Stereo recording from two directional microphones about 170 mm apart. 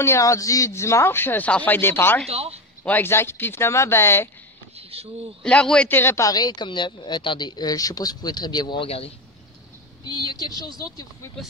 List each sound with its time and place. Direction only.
0.0 s speech: 15° left (ahead or behind)
2.2 s speech: 35° right (ahead or behind)
2.8 s speech: 10° left (ahead or behind)
5.4 s speech: 5° left (ahead or behind); by 9.1 s 35° left (ahead or behind)
10.0 s a woman's voice: 25° left (ahead or behind)